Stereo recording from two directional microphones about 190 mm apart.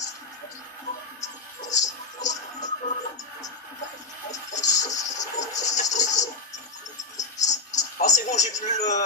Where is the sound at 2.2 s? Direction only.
40° left (ahead or behind).